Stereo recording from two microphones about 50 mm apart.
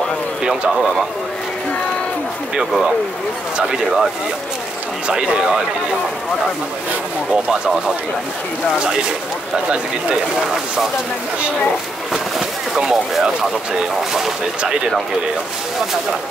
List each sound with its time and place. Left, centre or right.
0.4 s speech: centre
3.5 s speech: centre
5.0 s speech: right
7.4 s speech: centre
8.7 s speech: centre
12.1 s a sound: centre